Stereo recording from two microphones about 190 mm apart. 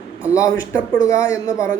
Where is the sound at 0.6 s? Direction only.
15° left (ahead or behind).